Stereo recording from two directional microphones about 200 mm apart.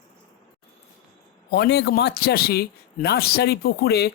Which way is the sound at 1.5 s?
55° left (ahead or behind).